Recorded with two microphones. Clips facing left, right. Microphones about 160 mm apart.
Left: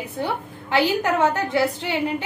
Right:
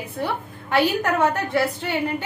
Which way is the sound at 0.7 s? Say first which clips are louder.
Even; 15° left (ahead or behind).